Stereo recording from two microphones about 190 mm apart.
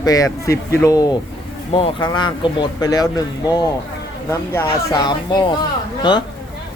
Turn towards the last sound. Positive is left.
turn(degrees=25)  # may be behind; listen again after turning